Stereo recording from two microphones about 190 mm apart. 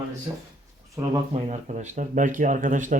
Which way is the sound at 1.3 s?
35° right (ahead or behind).